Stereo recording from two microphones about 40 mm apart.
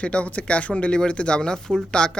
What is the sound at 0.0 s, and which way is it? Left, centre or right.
Speech, left.